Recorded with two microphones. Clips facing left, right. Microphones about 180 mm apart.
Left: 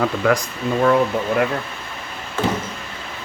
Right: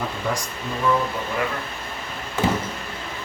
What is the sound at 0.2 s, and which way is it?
Speech, 90° left.